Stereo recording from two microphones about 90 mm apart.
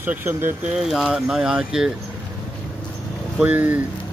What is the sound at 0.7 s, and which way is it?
Speech, 5° right (ahead or behind).